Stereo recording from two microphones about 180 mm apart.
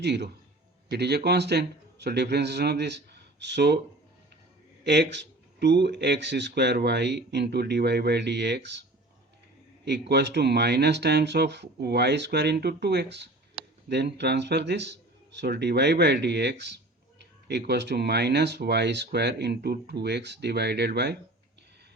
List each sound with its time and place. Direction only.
0.0 s speech: 70° right (ahead or behind)
4.8 s speech: 70° right (ahead or behind)
10.1 s speech: 70° right (ahead or behind)